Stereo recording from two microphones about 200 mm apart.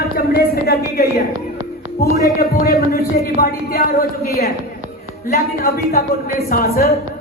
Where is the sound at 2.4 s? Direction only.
50° left (ahead or behind).